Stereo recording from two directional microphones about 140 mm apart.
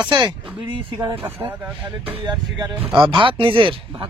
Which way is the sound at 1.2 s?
15° right (ahead or behind).